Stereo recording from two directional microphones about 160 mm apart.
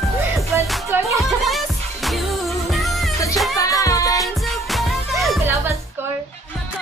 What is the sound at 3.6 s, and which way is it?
Music, 20° left (ahead or behind).